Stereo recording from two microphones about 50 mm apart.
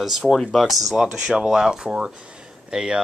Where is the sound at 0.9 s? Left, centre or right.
Centre.